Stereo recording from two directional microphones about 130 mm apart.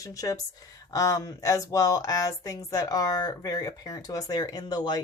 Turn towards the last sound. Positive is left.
turn(degrees=35)  # may be behind; listen again after turning